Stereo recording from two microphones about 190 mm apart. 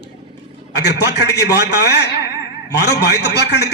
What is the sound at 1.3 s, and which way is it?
A man's voice, 60° left (ahead or behind).